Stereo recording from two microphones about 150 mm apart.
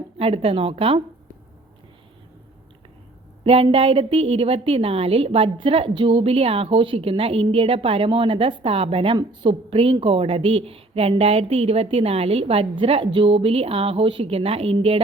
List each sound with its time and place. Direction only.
0.2 s speech: 40° right (ahead or behind)
3.4 s speech: 40° right (ahead or behind)